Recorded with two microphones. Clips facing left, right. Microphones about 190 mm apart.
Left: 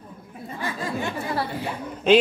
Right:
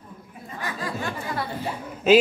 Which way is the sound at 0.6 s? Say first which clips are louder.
Left 2 dB; 25° left (ahead or behind).